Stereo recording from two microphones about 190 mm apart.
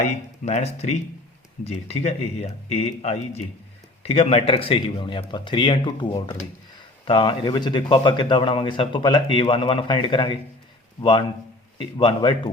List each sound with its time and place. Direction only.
0.4 s a man's voice: 35° left (ahead or behind)
11.8 s a man's voice: 25° left (ahead or behind)